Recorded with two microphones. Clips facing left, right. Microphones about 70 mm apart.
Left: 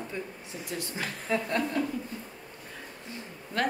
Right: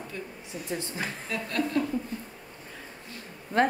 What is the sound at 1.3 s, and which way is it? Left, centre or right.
Speech, left.